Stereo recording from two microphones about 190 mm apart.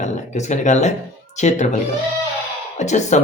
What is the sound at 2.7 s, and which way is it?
Speech, 40° left (ahead or behind).